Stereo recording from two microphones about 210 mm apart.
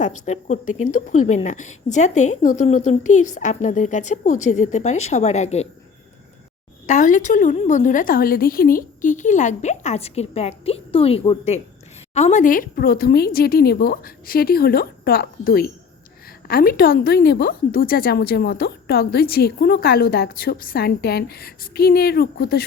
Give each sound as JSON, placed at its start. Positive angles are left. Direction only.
{"t": 0.3, "sound": "a woman's voice", "side_deg": 35}
{"t": 6.8, "sound": "a woman's voice", "side_deg": 35}